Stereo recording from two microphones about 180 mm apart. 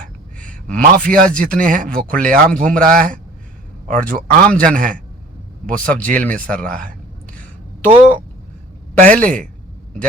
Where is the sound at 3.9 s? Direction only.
50° right (ahead or behind).